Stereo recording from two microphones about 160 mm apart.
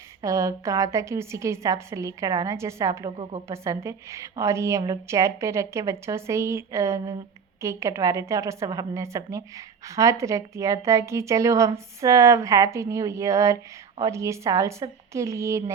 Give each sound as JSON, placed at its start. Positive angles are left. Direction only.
{"t": 0.2, "sound": "a woman's voice", "side_deg": -20}